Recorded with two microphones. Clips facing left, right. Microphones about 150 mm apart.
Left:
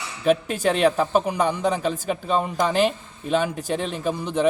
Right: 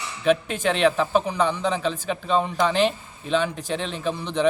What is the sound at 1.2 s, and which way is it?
A man's voice, 10° left (ahead or behind).